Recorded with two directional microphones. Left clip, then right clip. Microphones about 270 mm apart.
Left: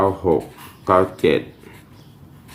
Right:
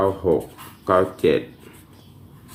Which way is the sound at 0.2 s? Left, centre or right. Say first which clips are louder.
Left 2 dB; centre.